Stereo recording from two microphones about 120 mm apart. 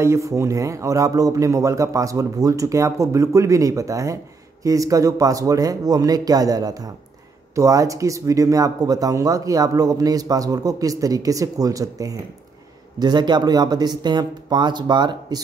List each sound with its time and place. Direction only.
0.0 s speech: 25° right (ahead or behind)